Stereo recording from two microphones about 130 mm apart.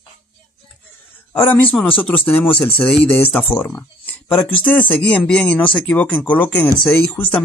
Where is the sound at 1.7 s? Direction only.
10° left (ahead or behind).